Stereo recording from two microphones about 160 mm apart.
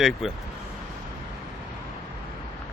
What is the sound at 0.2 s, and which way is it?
Speech, centre (ahead or behind).